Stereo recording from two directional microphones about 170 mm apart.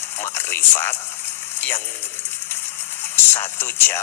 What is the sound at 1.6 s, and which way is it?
Speech, 10° left (ahead or behind).